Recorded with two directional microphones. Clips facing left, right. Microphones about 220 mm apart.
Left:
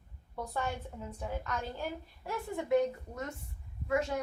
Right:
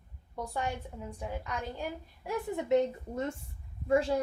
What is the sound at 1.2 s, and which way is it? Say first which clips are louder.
A child's voice: even; 15° right (ahead or behind).